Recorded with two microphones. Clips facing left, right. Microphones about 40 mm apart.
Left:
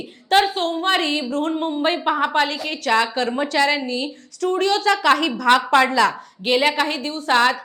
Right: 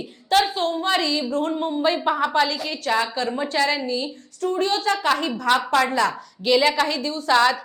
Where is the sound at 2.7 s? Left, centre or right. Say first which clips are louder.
Left 3 dB; left.